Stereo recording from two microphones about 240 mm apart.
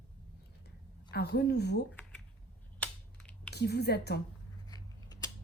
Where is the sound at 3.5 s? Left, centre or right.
Left.